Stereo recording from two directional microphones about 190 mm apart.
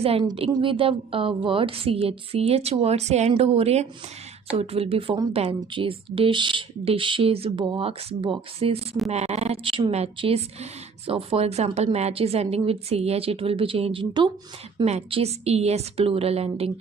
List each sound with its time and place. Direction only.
0.0 s speech: 30° right (ahead or behind)